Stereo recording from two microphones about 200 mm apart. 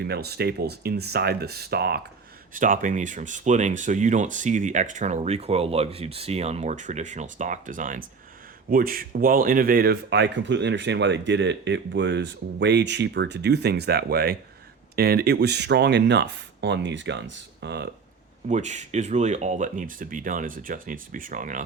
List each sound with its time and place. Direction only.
0.1 s speech: 55° right (ahead or behind)
2.5 s speech: 40° right (ahead or behind); by 17.8 s 60° right (ahead or behind)
18.4 s speech: 35° right (ahead or behind)